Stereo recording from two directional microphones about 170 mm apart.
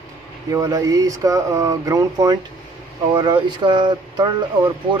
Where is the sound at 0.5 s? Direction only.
20° right (ahead or behind).